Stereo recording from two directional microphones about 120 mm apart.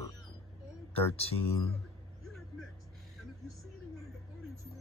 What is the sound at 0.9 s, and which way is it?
Speech, 55° left (ahead or behind).